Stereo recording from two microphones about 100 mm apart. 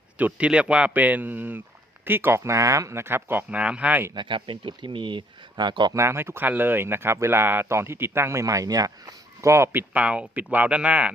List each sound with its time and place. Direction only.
0.2 s speech: 15° right (ahead or behind)
4.1 s speech: 55° right (ahead or behind)
5.9 s speech: 25° right (ahead or behind)
9.9 s speech: 15° right (ahead or behind)